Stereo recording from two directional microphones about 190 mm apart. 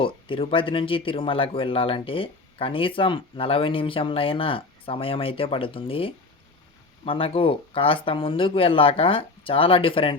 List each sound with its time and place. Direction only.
0.0 s speech: 30° left (ahead or behind)